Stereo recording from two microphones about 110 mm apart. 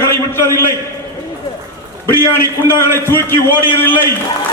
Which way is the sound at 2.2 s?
20° left (ahead or behind).